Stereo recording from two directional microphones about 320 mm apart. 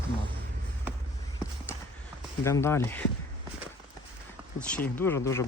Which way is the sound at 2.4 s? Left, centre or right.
Centre.